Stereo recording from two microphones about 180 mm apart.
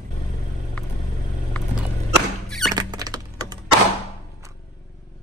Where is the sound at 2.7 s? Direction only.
20° right (ahead or behind).